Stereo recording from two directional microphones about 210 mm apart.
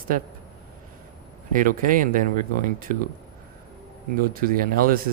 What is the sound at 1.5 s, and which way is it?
Speech, 40° right (ahead or behind).